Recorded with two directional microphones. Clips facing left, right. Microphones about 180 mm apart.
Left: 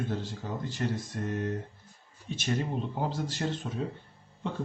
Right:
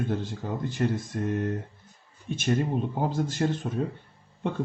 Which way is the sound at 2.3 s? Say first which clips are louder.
Right 5 dB; 50° right (ahead or behind).